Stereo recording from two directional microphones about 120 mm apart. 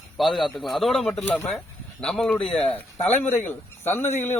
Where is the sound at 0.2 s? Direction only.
Centre (ahead or behind).